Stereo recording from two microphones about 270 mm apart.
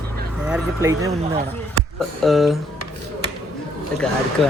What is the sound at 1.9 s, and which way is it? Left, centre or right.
Speech, centre.